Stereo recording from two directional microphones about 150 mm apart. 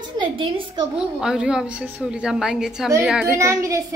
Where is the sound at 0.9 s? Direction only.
5° right (ahead or behind).